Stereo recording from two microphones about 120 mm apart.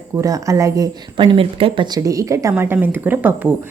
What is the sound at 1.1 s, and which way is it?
Speech, 50° right (ahead or behind).